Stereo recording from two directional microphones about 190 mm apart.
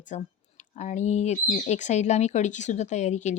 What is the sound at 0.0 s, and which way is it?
Speech, 40° left (ahead or behind).